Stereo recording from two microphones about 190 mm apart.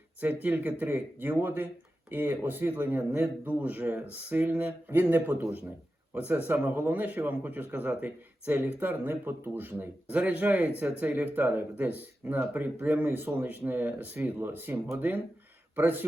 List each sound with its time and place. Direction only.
0.4 s speech: 10° right (ahead or behind)